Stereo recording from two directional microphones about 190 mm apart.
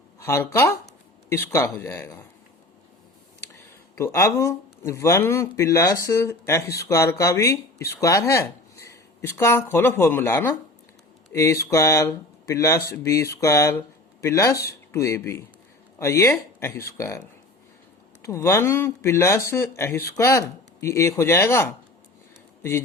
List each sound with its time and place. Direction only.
0.2 s speech: 15° left (ahead or behind)
3.5 s speech: 15° left (ahead or behind)
18.2 s speech: 15° left (ahead or behind)